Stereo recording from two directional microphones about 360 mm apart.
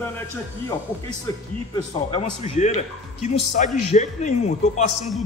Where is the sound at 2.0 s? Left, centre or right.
Centre.